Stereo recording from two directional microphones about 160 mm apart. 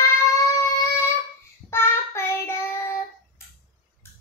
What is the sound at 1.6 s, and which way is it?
Child singing, 15° left (ahead or behind).